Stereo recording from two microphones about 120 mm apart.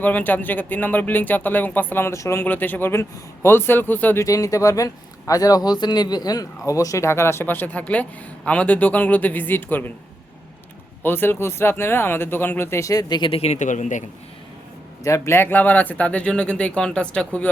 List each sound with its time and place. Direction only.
0.0 s speech: 15° left (ahead or behind)
4.3 s a man's voice: 30° left (ahead or behind)
11.0 s speech: 20° left (ahead or behind); by 13.3 s 35° left (ahead or behind)
13.3 s a man's voice: 65° left (ahead or behind); by 14.0 s 90° left
15.0 s speech: 25° left (ahead or behind)